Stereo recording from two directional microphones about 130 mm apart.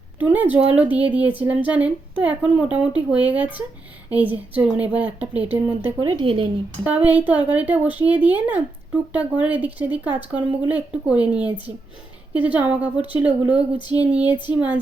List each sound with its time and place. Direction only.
0.2 s speech: 15° right (ahead or behind)
6.0 s a woman's voice: 40° right (ahead or behind)
6.8 s speech: 10° right (ahead or behind)